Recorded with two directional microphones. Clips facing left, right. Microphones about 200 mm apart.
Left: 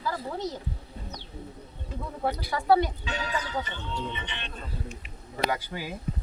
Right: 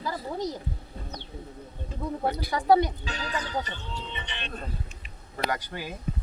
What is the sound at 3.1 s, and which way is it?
Speech, 35° right (ahead or behind).